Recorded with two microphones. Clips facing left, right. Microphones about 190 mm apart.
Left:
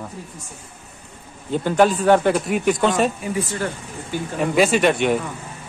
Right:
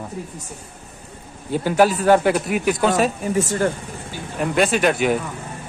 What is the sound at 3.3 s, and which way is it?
Speech, 45° right (ahead or behind).